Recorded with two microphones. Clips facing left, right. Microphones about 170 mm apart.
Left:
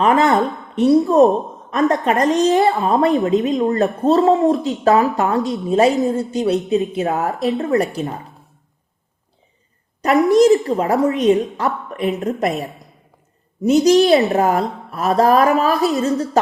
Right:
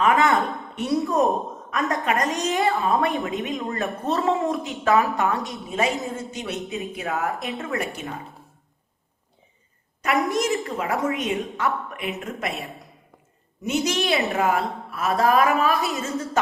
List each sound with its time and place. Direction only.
0.0 s a woman's voice: 35° left (ahead or behind)
10.0 s a woman's voice: 35° left (ahead or behind)